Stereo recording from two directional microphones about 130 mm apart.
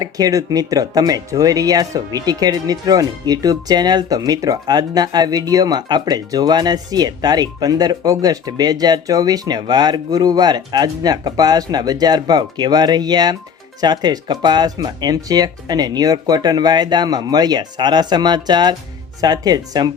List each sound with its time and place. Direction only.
0.0 s speech: 25° right (ahead or behind)